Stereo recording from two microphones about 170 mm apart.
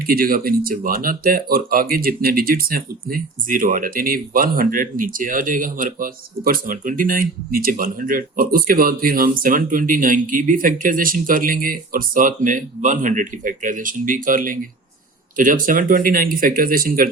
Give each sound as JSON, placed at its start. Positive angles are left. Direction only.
{"t": 0.1, "sound": "speech", "side_deg": -60}